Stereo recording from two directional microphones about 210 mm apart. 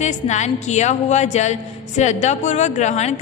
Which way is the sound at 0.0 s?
35° left (ahead or behind).